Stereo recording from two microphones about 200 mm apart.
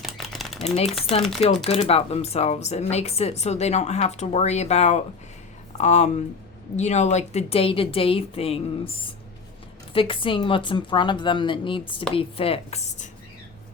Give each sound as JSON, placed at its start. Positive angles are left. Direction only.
{"t": 0.0, "sound": "typewriter", "side_deg": 0}
{"t": 0.9, "sound": "speech", "side_deg": 0}
{"t": 1.6, "sound": "speech", "side_deg": 30}